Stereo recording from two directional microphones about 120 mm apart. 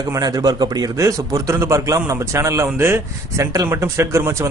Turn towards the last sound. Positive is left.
turn(degrees=-25)  # may be behind; listen again after turning